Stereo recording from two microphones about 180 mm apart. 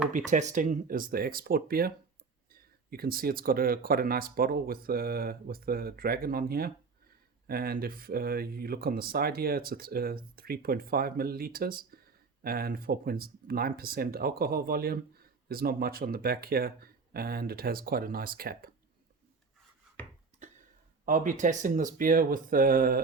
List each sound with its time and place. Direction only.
0.3 s speech: 40° right (ahead or behind)
21.0 s speech: 45° right (ahead or behind)